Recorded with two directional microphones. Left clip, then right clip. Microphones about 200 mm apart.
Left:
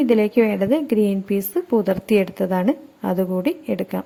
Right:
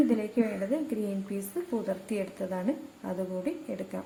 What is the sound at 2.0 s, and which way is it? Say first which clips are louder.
A woman's voice: left 14 dB; 45° left (ahead or behind).